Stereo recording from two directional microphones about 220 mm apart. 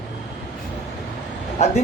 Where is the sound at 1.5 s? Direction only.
30° left (ahead or behind).